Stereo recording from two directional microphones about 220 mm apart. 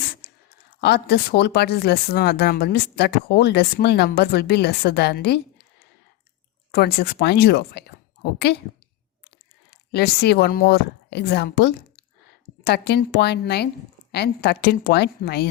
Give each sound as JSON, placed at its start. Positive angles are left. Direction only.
{"t": 0.8, "sound": "speech", "side_deg": 45}
{"t": 6.7, "sound": "speech", "side_deg": 50}
{"t": 9.6, "sound": "speech", "side_deg": 45}